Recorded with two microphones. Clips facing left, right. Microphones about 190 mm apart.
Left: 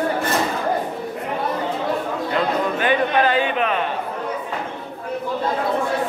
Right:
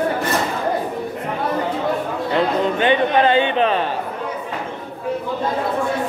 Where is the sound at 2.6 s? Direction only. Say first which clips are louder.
Right 3 dB; 25° right (ahead or behind).